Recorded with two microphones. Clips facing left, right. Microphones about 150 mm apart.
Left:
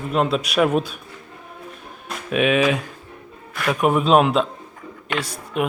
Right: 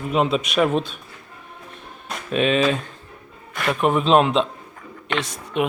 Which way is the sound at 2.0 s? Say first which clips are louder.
Left 1 dB; 5° left (ahead or behind).